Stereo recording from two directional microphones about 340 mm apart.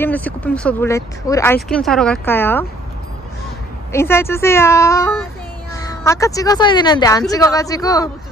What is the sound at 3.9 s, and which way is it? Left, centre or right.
Speech, centre.